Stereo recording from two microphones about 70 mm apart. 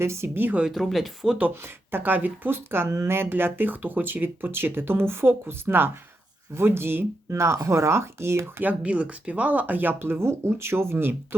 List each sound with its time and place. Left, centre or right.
0.0 s speech: right
0.7 s speech: centre
1.4 s speech: right
8.6 s speech: centre; by 11.3 s right